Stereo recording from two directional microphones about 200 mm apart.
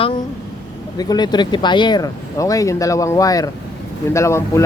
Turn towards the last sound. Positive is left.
turn(degrees=15)  # may be behind; listen again after turning